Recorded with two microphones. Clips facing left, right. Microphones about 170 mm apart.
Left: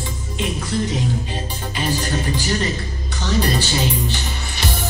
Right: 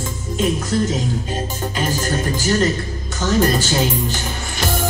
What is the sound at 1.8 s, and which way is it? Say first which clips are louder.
Music: even; 45° right (ahead or behind).